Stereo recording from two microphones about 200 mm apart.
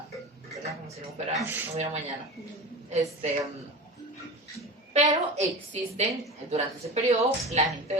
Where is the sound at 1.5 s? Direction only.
10° right (ahead or behind).